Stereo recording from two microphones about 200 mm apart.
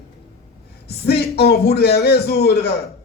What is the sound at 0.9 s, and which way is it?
A man's voice, 55° left (ahead or behind).